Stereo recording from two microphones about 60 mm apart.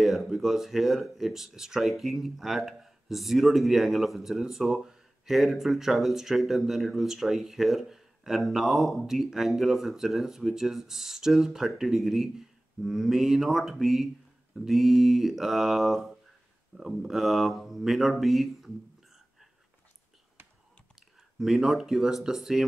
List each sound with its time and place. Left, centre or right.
0.0 s speech: centre
20.4 s whispering: right
20.9 s speech: centre